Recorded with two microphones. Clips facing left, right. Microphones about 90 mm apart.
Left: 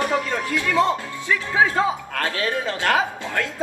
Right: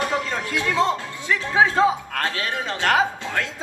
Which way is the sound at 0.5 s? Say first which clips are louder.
Left 1 dB; 20° right (ahead or behind).